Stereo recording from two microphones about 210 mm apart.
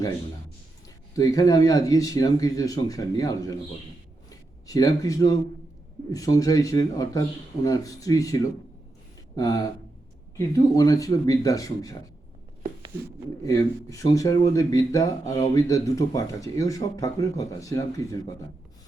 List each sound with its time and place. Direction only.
1.1 s a man's voice: 15° left (ahead or behind)
13.4 s speech: 15° left (ahead or behind)